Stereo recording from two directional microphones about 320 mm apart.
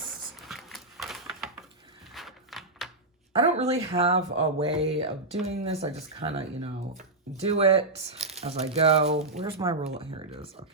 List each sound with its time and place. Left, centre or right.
0.4 s a sound: centre
2.1 s typewriter: centre
3.3 s speech: centre